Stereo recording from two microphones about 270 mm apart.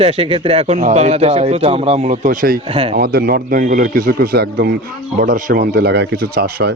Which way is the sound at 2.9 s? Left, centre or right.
Right.